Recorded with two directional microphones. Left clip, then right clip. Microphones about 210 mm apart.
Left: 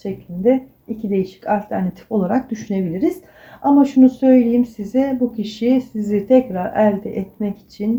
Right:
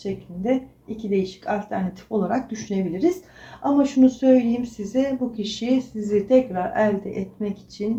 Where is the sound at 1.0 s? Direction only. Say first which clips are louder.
Left 4 dB; 50° left (ahead or behind).